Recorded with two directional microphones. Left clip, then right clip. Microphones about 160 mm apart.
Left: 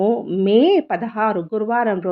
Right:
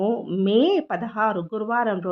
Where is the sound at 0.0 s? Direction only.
10° left (ahead or behind).